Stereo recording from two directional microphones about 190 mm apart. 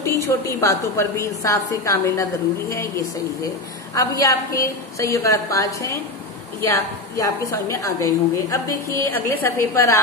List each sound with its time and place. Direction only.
0.0 s a woman's voice: 15° left (ahead or behind)